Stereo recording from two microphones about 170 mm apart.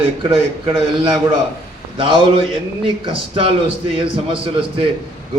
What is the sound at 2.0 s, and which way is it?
Speech, 30° right (ahead or behind).